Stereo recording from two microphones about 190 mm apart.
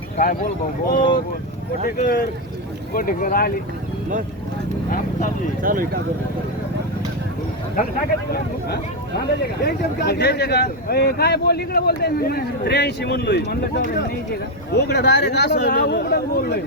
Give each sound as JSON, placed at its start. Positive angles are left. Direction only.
{"t": 0.2, "sound": "speech", "side_deg": 50}
{"t": 5.6, "sound": "speech", "side_deg": -50}
{"t": 9.6, "sound": "speech", "side_deg": 60}